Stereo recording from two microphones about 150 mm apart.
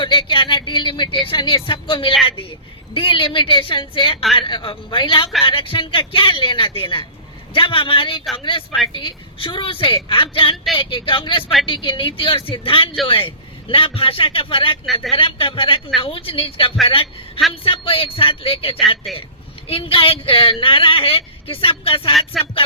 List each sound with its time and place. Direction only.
0.0 s speech: 35° left (ahead or behind)
19.1 s a man's voice: centre (ahead or behind)
19.6 s speech: 40° left (ahead or behind)
22.3 s a man's voice: centre (ahead or behind)